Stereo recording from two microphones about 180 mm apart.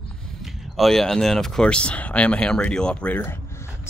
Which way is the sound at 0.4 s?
Centre (ahead or behind).